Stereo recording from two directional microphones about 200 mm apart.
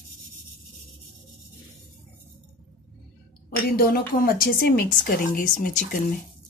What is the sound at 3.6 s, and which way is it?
A woman's voice, 50° left (ahead or behind).